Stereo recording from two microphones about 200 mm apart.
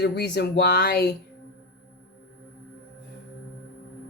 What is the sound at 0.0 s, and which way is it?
Speech, 55° left (ahead or behind).